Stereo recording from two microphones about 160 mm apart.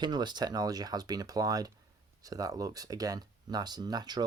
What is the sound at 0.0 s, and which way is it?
Speech, 25° right (ahead or behind).